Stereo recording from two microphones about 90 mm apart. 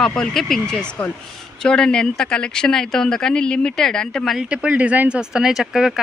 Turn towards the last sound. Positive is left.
turn(degrees=-5)  # may be behind; listen again after turning